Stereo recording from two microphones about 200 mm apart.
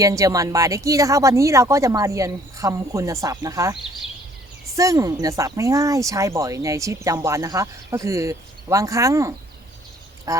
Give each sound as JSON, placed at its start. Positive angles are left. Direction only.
{"t": 0.0, "sound": "speech", "side_deg": -15}